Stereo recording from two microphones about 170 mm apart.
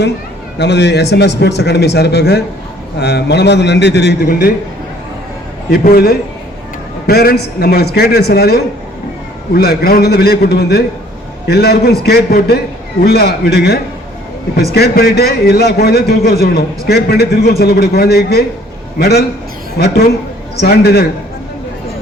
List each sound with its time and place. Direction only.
0.6 s a man's voice: 90° left; by 4.5 s 65° left (ahead or behind)
5.7 s a man's voice: 65° left (ahead or behind)